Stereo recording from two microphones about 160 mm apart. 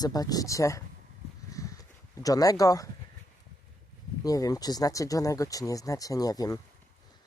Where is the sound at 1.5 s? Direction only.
20° left (ahead or behind).